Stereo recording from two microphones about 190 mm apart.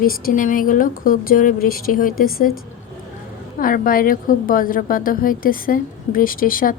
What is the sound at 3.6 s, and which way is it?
A woman's voice, 45° left (ahead or behind).